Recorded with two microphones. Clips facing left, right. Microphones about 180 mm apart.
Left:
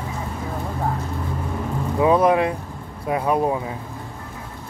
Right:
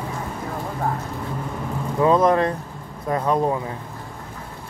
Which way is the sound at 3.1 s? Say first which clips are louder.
Even; 10° left (ahead or behind).